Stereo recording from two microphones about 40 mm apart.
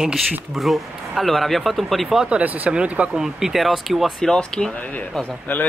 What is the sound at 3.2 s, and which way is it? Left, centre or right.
Speech, centre.